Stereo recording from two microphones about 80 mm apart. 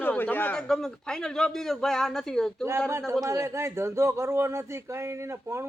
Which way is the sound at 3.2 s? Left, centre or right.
Right.